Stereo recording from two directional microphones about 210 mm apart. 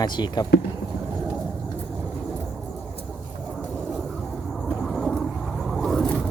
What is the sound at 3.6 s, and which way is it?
Vehicle, centre (ahead or behind).